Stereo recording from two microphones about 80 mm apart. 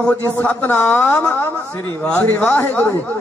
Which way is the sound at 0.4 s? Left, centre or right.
Centre.